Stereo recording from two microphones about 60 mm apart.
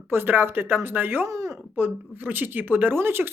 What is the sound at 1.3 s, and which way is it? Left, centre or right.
Speech, right.